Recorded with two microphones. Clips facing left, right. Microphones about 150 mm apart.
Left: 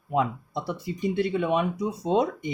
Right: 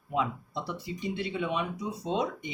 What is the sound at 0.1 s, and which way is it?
Speech, 50° left (ahead or behind).